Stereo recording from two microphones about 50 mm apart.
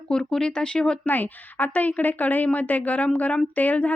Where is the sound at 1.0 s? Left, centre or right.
Left.